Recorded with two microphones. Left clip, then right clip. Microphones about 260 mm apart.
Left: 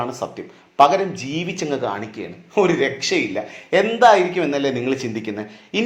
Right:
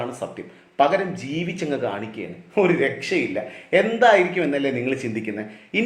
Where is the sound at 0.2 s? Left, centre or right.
Left.